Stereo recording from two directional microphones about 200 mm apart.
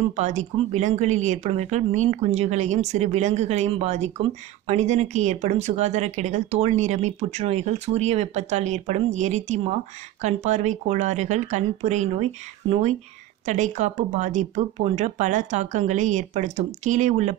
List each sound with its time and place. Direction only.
0.1 s speech: 35° right (ahead or behind)